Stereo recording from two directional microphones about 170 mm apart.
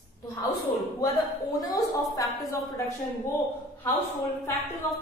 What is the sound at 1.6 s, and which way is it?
Speech, 20° left (ahead or behind).